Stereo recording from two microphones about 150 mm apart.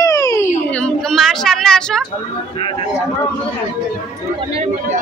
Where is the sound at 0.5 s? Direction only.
5° left (ahead or behind).